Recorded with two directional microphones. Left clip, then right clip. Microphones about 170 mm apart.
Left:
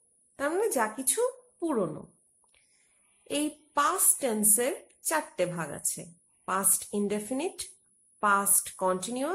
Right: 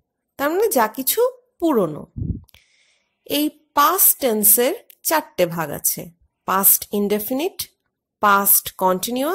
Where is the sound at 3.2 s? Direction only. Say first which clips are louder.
Right 10 dB; 45° right (ahead or behind).